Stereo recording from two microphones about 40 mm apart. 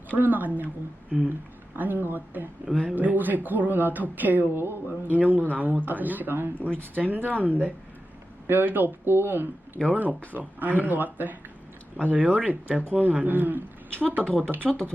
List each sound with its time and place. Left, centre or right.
0.1 s speech: right
1.7 s speech: right
2.9 s speech: right
4.5 s speech: right
5.0 s speech: right
9.9 s speech: right
12.0 s speech: right
12.9 s speech: right
14.2 s speech: centre
14.6 s speech: centre